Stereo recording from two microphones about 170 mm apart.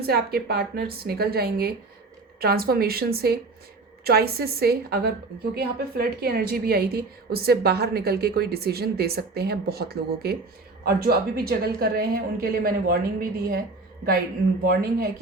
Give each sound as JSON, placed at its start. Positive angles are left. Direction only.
{"t": 0.0, "sound": "a woman's voice", "side_deg": -65}
{"t": 14.7, "sound": "a woman's voice", "side_deg": -60}